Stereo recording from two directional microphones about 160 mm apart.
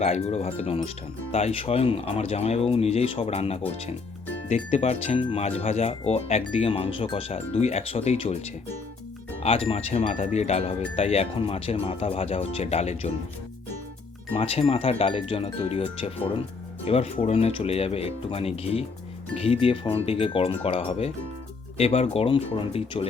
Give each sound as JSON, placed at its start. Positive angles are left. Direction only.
{"t": 0.0, "sound": "speech", "side_deg": 40}
{"t": 9.4, "sound": "speech", "side_deg": 40}
{"t": 14.3, "sound": "speech", "side_deg": 35}